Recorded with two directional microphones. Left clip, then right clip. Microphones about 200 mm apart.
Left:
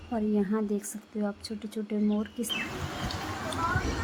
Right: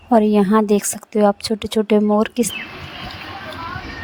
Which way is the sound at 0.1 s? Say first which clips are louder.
Right 16 dB; 50° right (ahead or behind).